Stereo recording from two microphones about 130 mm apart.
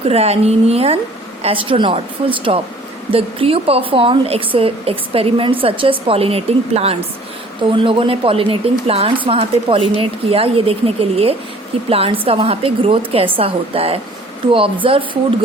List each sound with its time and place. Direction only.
0.1 s a woman's voice: 55° right (ahead or behind)